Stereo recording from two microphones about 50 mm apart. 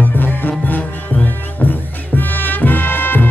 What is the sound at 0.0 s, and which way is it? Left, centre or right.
Music, left.